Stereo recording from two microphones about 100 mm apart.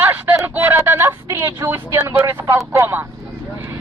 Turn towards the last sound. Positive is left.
turn(degrees=-25)  # may be behind; listen again after turning